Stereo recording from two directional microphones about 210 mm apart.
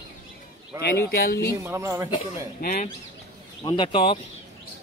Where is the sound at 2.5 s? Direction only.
40° left (ahead or behind).